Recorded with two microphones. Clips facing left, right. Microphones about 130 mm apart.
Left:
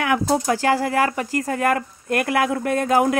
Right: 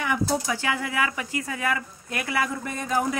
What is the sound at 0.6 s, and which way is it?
Speech, 40° left (ahead or behind).